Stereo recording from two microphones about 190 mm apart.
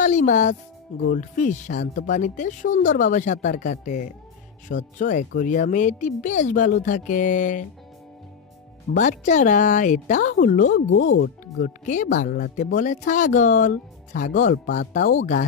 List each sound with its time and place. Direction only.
0.0 s music: 40° left (ahead or behind)
1.1 s speech: 40° left (ahead or behind)
8.9 s speech: 40° left (ahead or behind)
11.1 s speech: 60° left (ahead or behind)
11.8 s speech: 40° left (ahead or behind)